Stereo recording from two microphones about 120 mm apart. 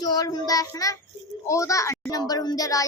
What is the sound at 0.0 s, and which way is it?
Child singing, 35° left (ahead or behind).